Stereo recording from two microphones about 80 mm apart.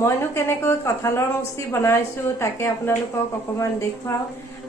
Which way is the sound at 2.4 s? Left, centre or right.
Left.